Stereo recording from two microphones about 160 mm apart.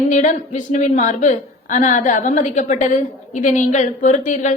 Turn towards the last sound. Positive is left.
turn(degrees=50)  # may be behind; listen again after turning